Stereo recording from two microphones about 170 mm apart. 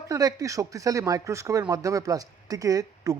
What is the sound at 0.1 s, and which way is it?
Speech, 20° right (ahead or behind).